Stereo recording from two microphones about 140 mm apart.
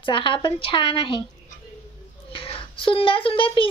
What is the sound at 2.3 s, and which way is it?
A child's voice, 40° left (ahead or behind).